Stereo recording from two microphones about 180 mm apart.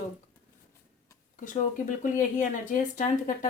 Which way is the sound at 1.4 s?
45° left (ahead or behind).